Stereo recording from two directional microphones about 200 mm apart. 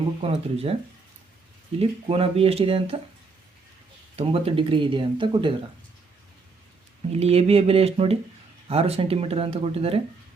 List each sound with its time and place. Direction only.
0.2 s speech: 30° right (ahead or behind)
1.8 s speech: 30° right (ahead or behind)
4.2 s speech: 30° right (ahead or behind)
7.1 s speech: 30° right (ahead or behind)